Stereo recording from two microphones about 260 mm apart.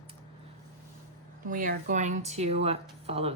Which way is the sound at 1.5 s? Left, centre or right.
Right.